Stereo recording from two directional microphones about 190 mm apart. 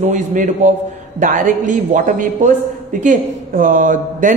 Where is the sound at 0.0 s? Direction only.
40° right (ahead or behind).